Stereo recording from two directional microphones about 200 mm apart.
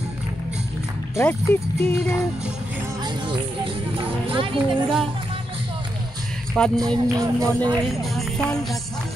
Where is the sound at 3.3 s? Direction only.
25° right (ahead or behind).